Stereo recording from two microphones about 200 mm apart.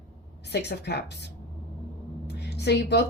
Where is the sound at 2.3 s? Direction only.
55° left (ahead or behind).